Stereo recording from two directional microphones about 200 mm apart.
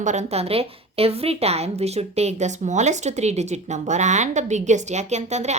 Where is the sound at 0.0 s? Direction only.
35° right (ahead or behind).